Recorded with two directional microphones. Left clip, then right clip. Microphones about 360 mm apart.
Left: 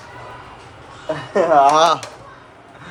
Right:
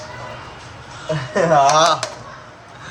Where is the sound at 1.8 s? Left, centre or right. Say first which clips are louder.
Even; centre.